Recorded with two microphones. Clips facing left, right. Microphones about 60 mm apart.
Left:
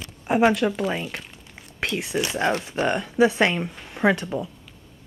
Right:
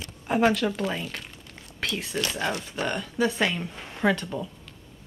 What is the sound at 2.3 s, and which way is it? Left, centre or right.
Speech, left.